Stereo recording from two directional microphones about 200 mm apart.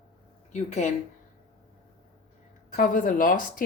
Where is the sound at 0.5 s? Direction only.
35° left (ahead or behind).